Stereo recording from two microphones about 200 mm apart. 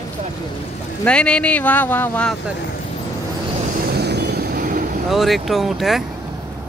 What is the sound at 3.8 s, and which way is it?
Vehicle, 55° right (ahead or behind).